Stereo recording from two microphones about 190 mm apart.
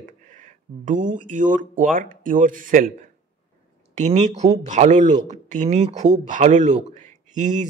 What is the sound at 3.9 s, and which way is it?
Speech, 35° right (ahead or behind).